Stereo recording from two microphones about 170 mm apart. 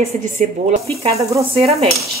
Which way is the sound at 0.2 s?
40° right (ahead or behind).